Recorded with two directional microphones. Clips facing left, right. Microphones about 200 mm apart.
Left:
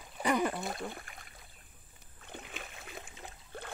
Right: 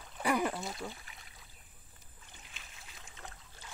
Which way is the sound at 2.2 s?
60° left (ahead or behind).